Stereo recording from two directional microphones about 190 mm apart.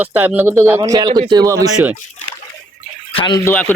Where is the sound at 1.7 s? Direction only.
5° right (ahead or behind).